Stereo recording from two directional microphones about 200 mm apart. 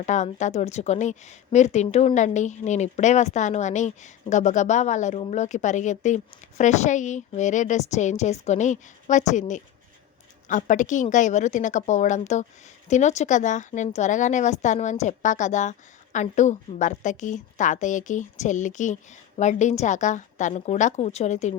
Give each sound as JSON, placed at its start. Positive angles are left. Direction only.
{"t": 0.0, "sound": "a woman's voice", "side_deg": 35}